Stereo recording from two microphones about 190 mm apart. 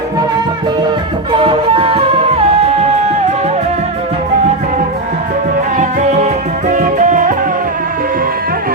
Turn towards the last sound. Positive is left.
turn(degrees=-40)  # may be behind; listen again after turning